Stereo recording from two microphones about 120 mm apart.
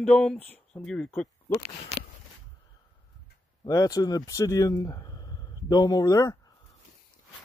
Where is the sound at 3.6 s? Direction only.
30° left (ahead or behind).